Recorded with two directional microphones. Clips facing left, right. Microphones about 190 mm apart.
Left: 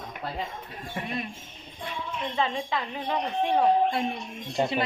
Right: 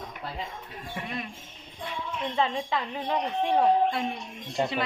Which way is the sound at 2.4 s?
5° left (ahead or behind).